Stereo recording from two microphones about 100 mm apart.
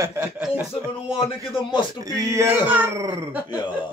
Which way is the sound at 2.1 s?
30° right (ahead or behind).